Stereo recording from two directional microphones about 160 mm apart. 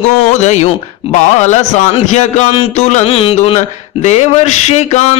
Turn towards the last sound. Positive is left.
turn(degrees=45)  # may be behind; listen again after turning